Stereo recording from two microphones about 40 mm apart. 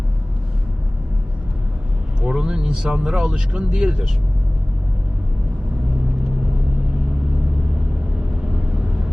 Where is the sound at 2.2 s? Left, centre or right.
Centre.